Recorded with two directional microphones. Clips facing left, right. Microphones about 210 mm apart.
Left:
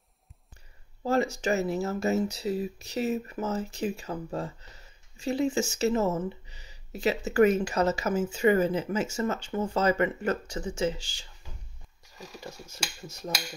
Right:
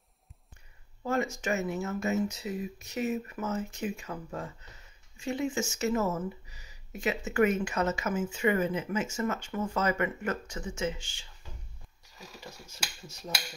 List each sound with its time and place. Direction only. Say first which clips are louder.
1.0 s speech: left 4 dB; 35° left (ahead or behind)